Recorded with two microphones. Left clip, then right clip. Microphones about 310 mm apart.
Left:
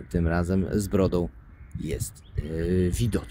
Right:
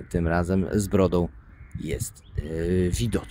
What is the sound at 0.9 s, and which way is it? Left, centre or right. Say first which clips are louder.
Speech: right 3 dB; centre.